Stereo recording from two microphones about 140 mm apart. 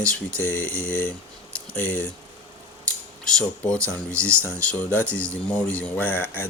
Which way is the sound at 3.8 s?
20° right (ahead or behind).